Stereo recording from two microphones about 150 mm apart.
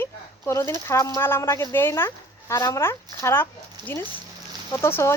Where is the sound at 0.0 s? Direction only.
15° left (ahead or behind).